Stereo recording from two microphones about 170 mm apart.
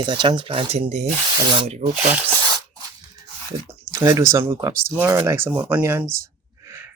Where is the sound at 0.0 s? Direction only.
25° right (ahead or behind).